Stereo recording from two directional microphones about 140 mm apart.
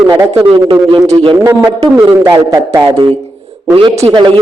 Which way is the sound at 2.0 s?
20° right (ahead or behind).